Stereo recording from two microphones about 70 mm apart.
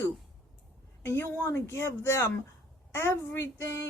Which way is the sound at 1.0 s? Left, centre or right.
Left.